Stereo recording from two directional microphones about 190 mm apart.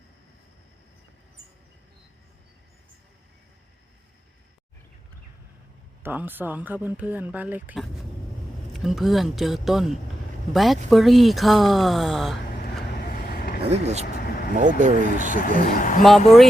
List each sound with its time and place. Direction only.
6.0 s speech: 10° right (ahead or behind)
13.1 s vehicle: 50° left (ahead or behind)
13.7 s speech: 35° right (ahead or behind)
15.4 s speech: 45° left (ahead or behind)